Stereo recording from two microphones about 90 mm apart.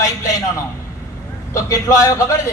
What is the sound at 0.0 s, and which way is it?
A man's voice, 35° left (ahead or behind).